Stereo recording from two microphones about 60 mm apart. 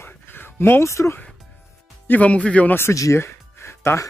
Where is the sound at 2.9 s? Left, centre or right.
Left.